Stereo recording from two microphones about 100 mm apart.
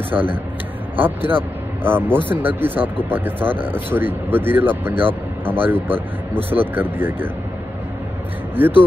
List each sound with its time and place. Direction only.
0.1 s a man's voice: 10° right (ahead or behind)
0.9 s speech: 20° right (ahead or behind)
8.6 s speech: 20° right (ahead or behind)